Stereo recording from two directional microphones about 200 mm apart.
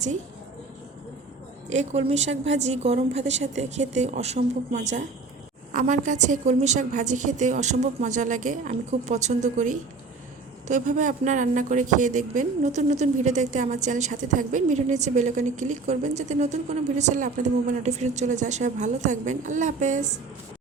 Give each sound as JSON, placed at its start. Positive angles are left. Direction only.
{"t": 1.7, "sound": "speech", "side_deg": -35}